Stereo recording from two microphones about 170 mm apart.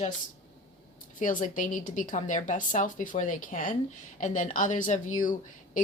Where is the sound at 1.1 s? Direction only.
50° left (ahead or behind).